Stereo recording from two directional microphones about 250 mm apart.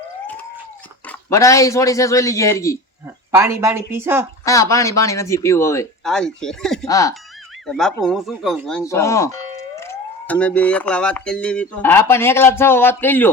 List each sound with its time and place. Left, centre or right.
1.0 s speech: centre
3.3 s speech: centre
4.4 s speech: centre
6.8 s speech: centre
7.7 s speech: centre
8.8 s speech: centre